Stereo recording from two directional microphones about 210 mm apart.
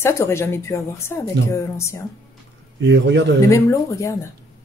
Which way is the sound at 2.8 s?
55° right (ahead or behind).